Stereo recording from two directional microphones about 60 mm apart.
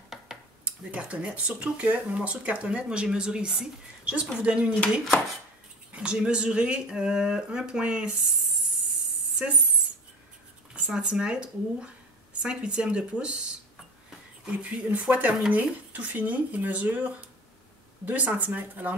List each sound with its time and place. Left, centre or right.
0.7 s speech: right
5.9 s speech: centre
10.9 s speech: centre